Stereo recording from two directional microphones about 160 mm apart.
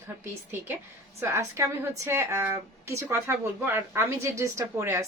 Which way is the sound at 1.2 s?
15° right (ahead or behind).